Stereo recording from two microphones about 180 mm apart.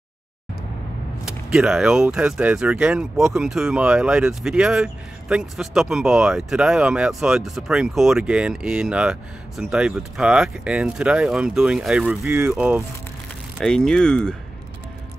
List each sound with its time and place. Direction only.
1.2 s speech: 5° right (ahead or behind)